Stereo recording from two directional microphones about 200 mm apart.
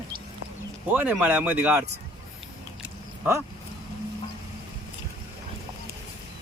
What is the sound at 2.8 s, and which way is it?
Biting, 10° right (ahead or behind).